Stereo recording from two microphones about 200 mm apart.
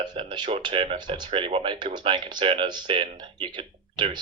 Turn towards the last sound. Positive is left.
turn(degrees=-25)  # may be behind; listen again after turning